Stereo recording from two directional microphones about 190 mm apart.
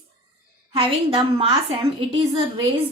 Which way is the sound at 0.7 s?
30° right (ahead or behind).